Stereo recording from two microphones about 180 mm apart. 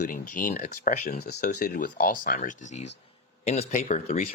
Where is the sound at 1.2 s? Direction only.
60° left (ahead or behind).